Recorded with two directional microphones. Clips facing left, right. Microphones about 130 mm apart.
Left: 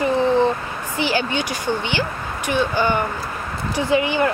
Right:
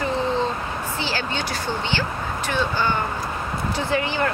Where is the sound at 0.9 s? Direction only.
15° left (ahead or behind).